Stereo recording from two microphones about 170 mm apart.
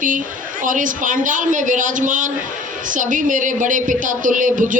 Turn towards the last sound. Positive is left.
turn(degrees=-50)  # may be behind; listen again after turning